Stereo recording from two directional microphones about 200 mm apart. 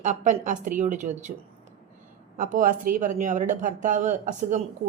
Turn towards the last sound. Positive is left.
turn(degrees=-40)  # may be behind; listen again after turning